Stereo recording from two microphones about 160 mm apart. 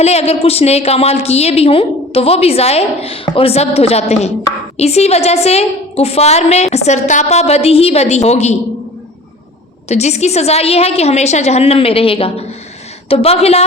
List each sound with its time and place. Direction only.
0.0 s a woman's voice: 40° left (ahead or behind)
9.9 s a woman's voice: 45° left (ahead or behind)